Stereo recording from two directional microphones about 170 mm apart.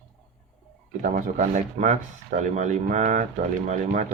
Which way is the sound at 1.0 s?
50° right (ahead or behind).